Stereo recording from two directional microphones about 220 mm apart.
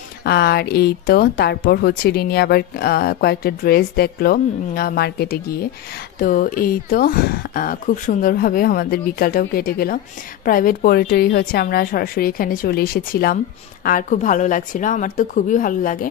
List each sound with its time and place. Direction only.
0.2 s speech: 45° left (ahead or behind)